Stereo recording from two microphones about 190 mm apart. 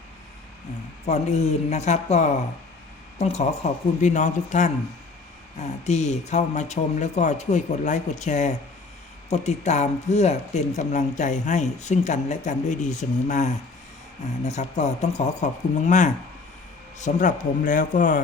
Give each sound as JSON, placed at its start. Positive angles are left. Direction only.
{"t": 1.0, "sound": "speech", "side_deg": 35}
{"t": 5.8, "sound": "a man's voice", "side_deg": 35}